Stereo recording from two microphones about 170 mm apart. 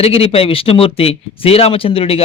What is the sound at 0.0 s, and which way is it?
Speech, 35° left (ahead or behind).